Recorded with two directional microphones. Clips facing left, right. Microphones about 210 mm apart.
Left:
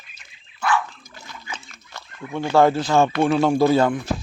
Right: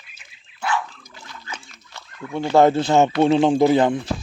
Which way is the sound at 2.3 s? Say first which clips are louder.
Right 2 dB; 20° right (ahead or behind).